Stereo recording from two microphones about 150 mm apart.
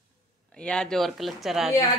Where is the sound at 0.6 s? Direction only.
5° left (ahead or behind).